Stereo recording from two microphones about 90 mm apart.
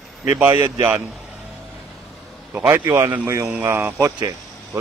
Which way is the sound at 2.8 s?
40° right (ahead or behind).